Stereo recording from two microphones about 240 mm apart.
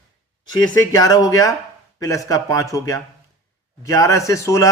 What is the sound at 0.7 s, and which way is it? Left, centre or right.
A man's voice, centre.